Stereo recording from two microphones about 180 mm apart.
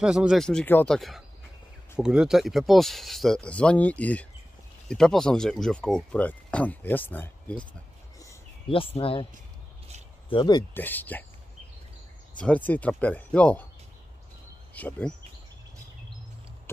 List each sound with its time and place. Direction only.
0.0 s speech: 5° right (ahead or behind)
8.6 s speech: 30° left (ahead or behind)
10.3 s speech: 25° left (ahead or behind)
10.7 s speech: 10° left (ahead or behind)
12.4 s speech: 10° left (ahead or behind)
14.7 s speech: 10° left (ahead or behind)